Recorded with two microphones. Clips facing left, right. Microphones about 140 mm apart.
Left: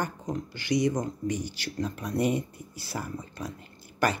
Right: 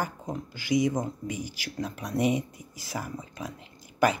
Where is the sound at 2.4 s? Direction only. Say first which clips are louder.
Even; 90° right.